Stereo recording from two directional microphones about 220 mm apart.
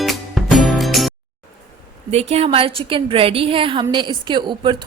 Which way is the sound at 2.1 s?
30° right (ahead or behind).